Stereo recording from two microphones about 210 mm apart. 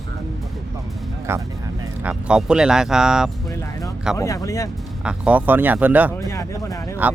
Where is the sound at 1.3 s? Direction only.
10° right (ahead or behind).